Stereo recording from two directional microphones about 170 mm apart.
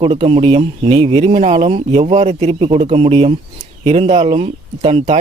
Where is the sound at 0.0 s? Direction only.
35° right (ahead or behind).